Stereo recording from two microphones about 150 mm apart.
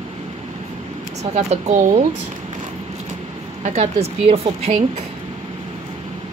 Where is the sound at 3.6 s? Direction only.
45° right (ahead or behind).